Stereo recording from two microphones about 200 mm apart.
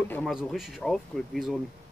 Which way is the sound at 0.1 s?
Centre (ahead or behind).